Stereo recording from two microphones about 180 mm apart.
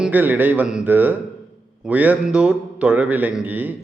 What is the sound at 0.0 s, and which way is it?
A man's voice, 10° right (ahead or behind).